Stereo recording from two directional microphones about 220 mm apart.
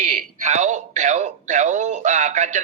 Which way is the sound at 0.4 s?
30° right (ahead or behind).